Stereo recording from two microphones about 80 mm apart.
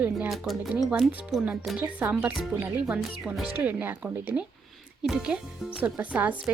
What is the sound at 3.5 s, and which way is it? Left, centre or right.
Speech, right.